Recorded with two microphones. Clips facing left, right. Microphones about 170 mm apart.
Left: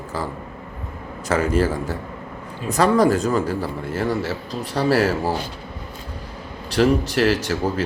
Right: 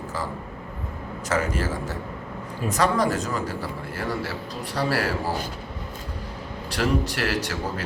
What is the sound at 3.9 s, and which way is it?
A man's voice, 25° left (ahead or behind).